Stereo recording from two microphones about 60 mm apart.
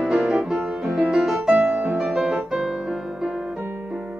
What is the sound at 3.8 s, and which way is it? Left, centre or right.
Piano, centre.